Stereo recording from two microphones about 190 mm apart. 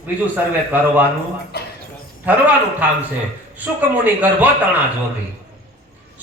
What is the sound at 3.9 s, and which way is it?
Speech, 10° right (ahead or behind).